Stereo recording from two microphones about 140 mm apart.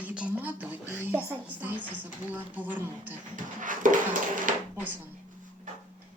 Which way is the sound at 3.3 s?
70° right (ahead or behind).